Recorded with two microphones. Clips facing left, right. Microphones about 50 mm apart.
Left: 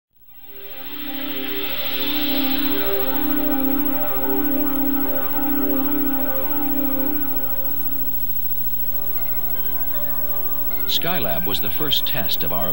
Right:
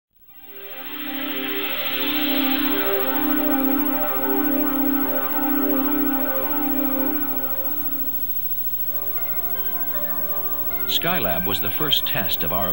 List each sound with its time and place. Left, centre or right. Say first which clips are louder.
0.9 s music: right 1 dB; centre
9.8 s music: right 3 dB; centre